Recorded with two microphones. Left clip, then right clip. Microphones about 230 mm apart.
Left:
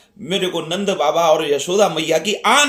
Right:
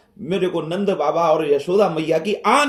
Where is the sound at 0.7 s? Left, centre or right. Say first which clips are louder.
Left 4 dB; left.